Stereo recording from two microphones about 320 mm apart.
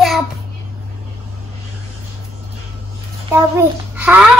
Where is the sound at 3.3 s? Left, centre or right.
Centre.